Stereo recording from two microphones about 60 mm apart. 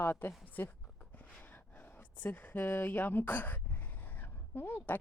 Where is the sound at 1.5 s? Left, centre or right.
Left.